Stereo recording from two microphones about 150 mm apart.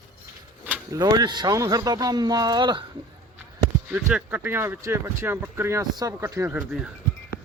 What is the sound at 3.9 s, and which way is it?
Speech, 10° right (ahead or behind).